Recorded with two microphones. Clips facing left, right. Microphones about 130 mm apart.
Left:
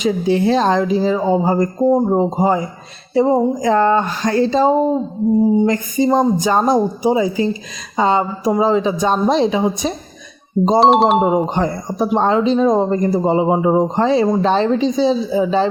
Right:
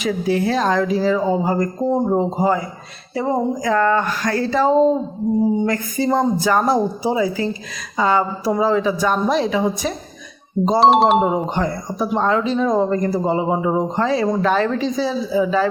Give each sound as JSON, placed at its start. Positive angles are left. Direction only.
{"t": 0.0, "sound": "speech", "side_deg": 25}
{"t": 10.8, "sound": "speech", "side_deg": 0}
{"t": 11.3, "sound": "speech", "side_deg": 20}